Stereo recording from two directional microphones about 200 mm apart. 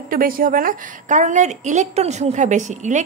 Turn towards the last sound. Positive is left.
turn(degrees=-35)  # may be behind; listen again after turning